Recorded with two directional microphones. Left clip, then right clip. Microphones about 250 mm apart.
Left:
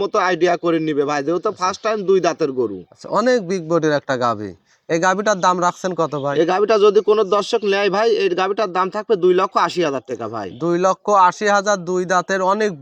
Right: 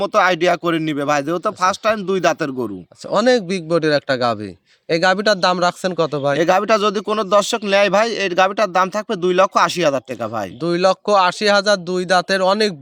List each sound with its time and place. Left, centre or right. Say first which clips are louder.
0.0 s speech: right 2 dB; right
3.1 s speech: right 1 dB; right
6.3 s a man's voice: even; right
10.6 s speech: right 1 dB; right